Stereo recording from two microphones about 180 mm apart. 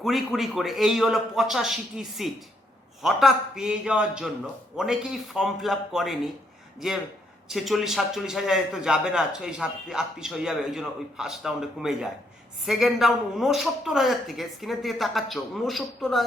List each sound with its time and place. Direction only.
0.0 s a man's voice: centre (ahead or behind)